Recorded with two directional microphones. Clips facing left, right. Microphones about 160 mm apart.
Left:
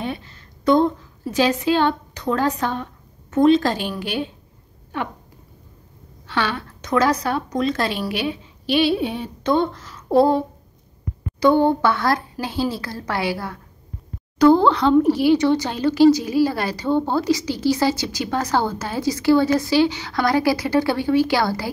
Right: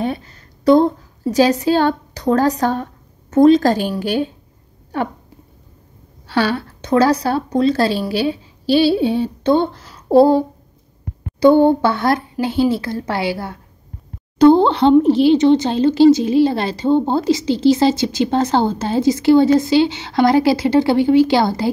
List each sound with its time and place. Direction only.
0.0 s a woman's voice: 40° right (ahead or behind)
6.2 s a woman's voice: 35° right (ahead or behind)